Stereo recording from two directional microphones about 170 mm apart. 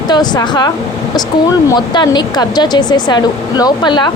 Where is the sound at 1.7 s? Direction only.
25° left (ahead or behind).